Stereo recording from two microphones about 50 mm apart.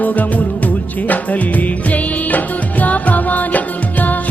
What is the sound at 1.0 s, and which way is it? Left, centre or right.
Music, left.